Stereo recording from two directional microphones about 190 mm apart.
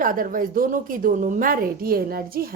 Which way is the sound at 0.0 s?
45° right (ahead or behind).